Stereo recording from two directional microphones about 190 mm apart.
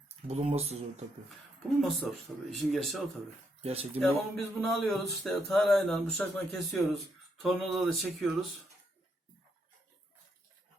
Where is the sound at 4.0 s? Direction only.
Centre (ahead or behind).